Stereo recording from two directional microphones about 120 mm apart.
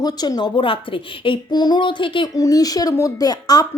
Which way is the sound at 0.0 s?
35° left (ahead or behind).